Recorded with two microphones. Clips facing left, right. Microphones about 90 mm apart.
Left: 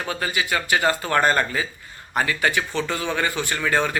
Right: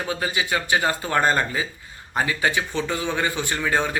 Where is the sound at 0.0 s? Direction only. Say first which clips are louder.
Even; 20° right (ahead or behind).